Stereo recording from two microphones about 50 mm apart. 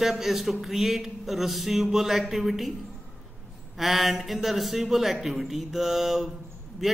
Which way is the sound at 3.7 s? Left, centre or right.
Centre.